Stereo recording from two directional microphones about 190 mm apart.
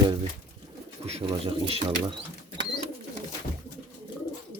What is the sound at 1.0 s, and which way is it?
Speech, 30° right (ahead or behind).